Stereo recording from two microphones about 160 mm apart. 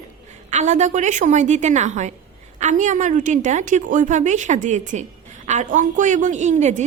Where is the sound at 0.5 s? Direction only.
45° right (ahead or behind).